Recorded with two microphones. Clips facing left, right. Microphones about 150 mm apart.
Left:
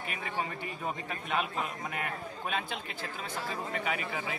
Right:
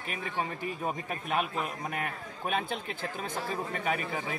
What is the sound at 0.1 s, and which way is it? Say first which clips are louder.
Speech: right 3 dB; 40° right (ahead or behind).